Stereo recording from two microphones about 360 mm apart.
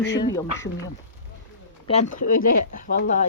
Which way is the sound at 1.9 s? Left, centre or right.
Left.